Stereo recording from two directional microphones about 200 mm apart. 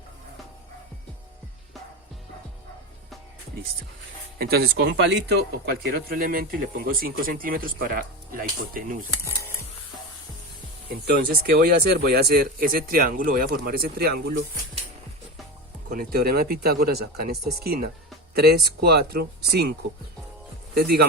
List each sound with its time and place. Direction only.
4.4 s speech: 50° right (ahead or behind)
9.2 s a sound: 15° left (ahead or behind)
10.8 s speech: 50° right (ahead or behind)
15.9 s speech: 45° right (ahead or behind)
20.7 s speech: 50° right (ahead or behind)